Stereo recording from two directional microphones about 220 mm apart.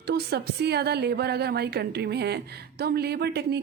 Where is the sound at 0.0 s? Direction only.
50° right (ahead or behind).